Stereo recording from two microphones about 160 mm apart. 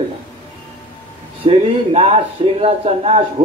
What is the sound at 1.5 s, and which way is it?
A man's voice, 35° right (ahead or behind).